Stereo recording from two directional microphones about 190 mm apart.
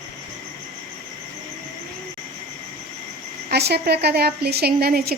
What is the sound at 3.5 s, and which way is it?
A woman's voice, 60° right (ahead or behind).